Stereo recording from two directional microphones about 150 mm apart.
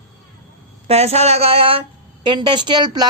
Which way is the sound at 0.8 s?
45° right (ahead or behind).